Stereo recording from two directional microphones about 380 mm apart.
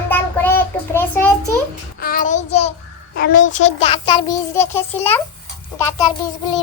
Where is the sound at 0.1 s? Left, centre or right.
Centre.